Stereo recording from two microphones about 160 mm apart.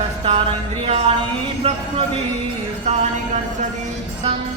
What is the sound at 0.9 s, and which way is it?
Speech, 40° right (ahead or behind).